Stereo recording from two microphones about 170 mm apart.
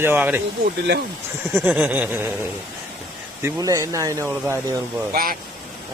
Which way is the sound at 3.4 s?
15° right (ahead or behind).